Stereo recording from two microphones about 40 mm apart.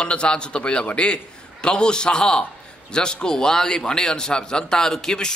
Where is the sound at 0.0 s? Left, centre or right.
Left.